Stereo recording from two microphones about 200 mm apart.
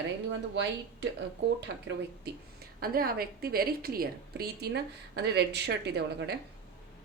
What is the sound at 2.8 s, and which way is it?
A woman's voice, 50° right (ahead or behind).